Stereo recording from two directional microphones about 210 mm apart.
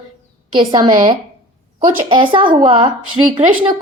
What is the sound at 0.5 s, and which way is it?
Speech, 20° right (ahead or behind).